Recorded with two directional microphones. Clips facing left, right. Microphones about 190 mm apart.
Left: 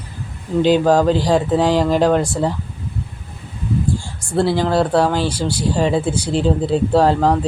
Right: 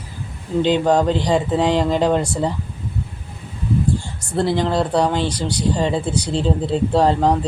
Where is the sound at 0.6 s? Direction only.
5° left (ahead or behind).